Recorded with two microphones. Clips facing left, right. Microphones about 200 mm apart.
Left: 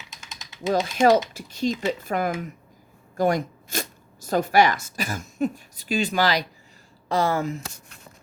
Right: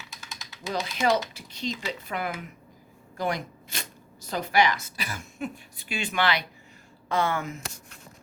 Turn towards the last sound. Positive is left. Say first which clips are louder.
# left 4 dB
turn(degrees=35)  # may be behind; listen again after turning